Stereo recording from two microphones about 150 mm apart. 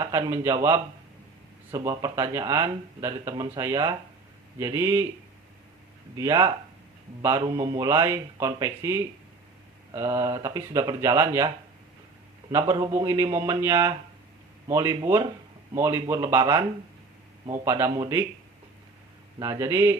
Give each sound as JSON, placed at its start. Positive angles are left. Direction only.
{"t": 0.0, "sound": "speech", "side_deg": -20}
{"t": 6.1, "sound": "speech", "side_deg": -20}
{"t": 19.4, "sound": "speech", "side_deg": -20}